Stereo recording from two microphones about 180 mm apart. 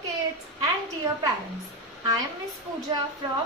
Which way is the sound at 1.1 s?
20° right (ahead or behind).